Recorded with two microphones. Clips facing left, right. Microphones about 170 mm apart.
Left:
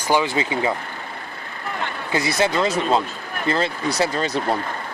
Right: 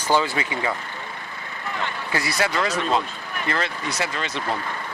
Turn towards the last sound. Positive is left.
turn(degrees=35)  # may be behind; listen again after turning